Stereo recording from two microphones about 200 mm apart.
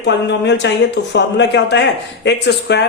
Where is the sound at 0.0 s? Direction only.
60° left (ahead or behind).